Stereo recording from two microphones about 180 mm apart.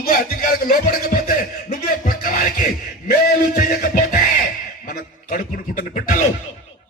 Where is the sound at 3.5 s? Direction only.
50° left (ahead or behind).